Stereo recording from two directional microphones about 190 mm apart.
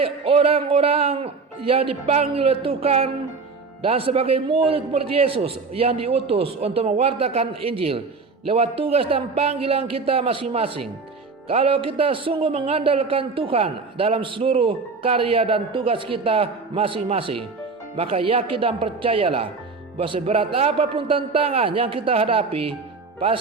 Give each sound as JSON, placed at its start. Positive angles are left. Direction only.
{"t": 0.0, "sound": "a man's voice", "side_deg": -30}